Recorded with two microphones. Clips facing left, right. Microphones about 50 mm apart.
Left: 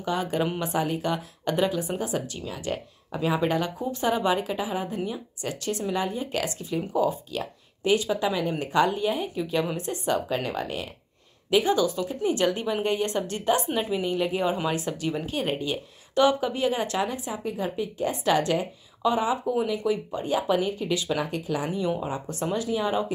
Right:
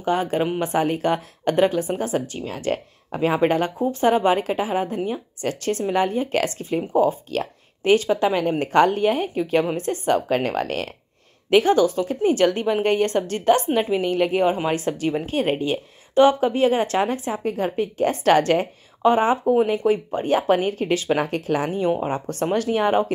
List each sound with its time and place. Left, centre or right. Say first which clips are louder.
0.0 s a woman's voice: right 5 dB; right
7.2 s a woman's voice: right 6 dB; right
11.5 s a woman's voice: right 6 dB; right
22.1 s speech: right 6 dB; right